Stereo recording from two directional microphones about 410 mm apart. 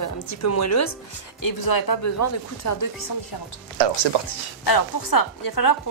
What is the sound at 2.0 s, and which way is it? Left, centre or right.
Speech, left.